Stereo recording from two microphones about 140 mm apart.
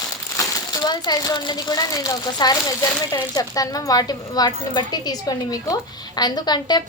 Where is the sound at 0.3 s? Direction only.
30° left (ahead or behind).